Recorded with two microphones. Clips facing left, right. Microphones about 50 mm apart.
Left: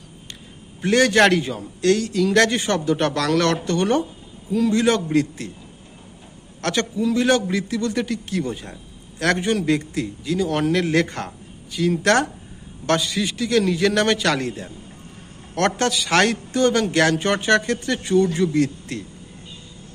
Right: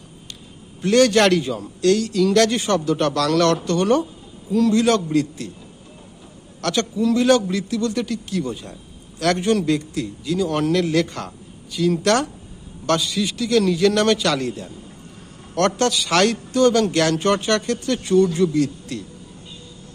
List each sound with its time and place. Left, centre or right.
0.8 s a man's voice: left
6.6 s a man's voice: left
10.8 s a man's voice: left